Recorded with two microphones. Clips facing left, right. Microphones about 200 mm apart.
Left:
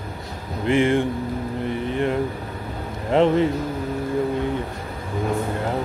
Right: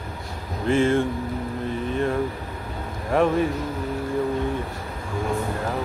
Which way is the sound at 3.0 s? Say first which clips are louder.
Left 3 dB; 20° left (ahead or behind).